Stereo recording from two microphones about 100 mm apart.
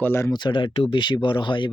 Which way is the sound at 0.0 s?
25° left (ahead or behind).